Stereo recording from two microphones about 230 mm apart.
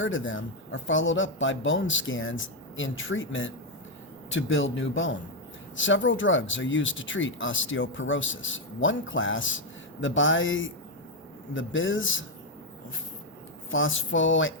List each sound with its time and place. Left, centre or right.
0.0 s speech: left
13.7 s speech: left